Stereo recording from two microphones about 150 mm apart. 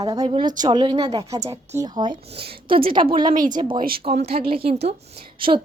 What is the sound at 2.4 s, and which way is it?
Speech, 75° right (ahead or behind).